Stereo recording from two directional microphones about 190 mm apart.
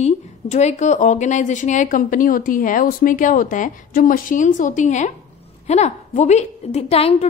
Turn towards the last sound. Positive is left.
turn(degrees=30)  # may be behind; listen again after turning